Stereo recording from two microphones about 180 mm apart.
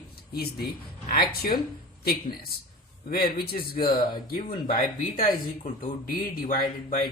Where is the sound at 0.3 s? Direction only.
55° left (ahead or behind).